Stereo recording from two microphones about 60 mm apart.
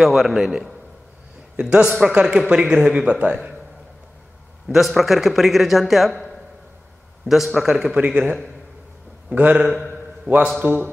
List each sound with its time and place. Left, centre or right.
0.0 s a man's voice: centre
4.6 s speech: centre
7.2 s a man's voice: centre
8.0 s a man's voice: right